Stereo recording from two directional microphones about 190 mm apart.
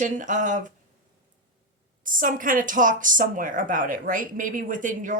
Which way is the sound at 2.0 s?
45° right (ahead or behind).